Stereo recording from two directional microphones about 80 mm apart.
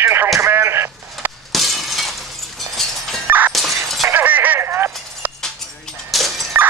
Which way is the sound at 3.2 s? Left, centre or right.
Right.